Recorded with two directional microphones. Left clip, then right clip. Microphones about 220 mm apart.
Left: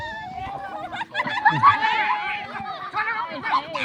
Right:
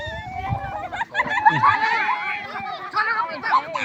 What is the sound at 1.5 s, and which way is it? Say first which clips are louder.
Snicker: even; 50° right (ahead or behind).